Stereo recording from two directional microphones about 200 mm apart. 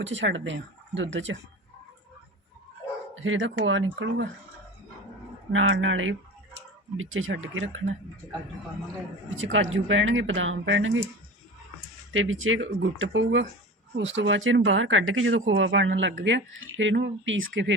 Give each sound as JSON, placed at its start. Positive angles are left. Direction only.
{"t": 0.0, "sound": "speech", "side_deg": -65}
{"t": 3.2, "sound": "speech", "side_deg": -75}
{"t": 5.5, "sound": "speech", "side_deg": -85}
{"t": 6.9, "sound": "speech", "side_deg": -85}
{"t": 9.3, "sound": "speech", "side_deg": -75}
{"t": 12.1, "sound": "speech", "side_deg": -80}